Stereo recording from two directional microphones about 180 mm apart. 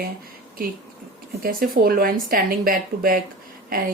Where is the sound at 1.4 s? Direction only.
55° right (ahead or behind).